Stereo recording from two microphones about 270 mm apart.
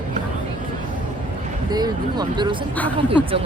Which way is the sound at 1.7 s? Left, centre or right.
Centre.